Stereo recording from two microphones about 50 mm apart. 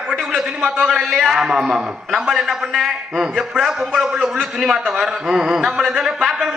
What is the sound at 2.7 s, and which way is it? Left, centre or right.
Speech, centre.